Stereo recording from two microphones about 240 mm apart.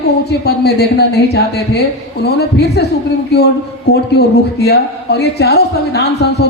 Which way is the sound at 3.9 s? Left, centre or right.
Left.